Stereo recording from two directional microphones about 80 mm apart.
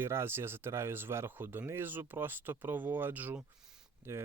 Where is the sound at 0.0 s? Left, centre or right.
Right.